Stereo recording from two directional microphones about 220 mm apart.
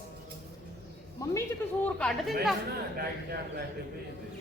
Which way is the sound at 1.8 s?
5° left (ahead or behind).